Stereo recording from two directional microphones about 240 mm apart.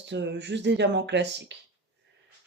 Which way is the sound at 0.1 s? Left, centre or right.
Right.